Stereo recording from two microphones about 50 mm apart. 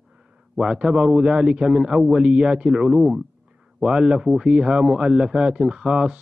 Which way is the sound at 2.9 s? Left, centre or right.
Centre.